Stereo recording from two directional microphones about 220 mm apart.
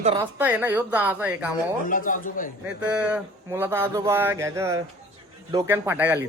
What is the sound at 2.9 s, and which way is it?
A man's voice, 5° right (ahead or behind).